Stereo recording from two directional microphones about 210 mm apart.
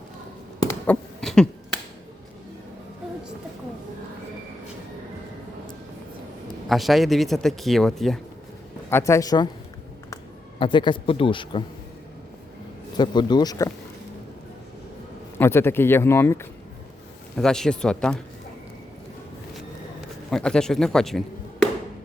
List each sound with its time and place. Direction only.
0.9 s a sound: centre (ahead or behind)
6.7 s speech: centre (ahead or behind)
8.9 s speech: 10° left (ahead or behind)
10.6 s a man's voice: 20° left (ahead or behind)
13.0 s a man's voice: 20° left (ahead or behind)
15.4 s speech: 10° left (ahead or behind)
20.3 s speech: 5° left (ahead or behind)